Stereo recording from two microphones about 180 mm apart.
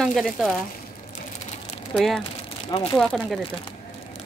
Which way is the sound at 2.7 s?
35° left (ahead or behind).